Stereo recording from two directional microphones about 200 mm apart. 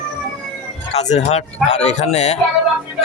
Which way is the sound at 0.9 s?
35° left (ahead or behind).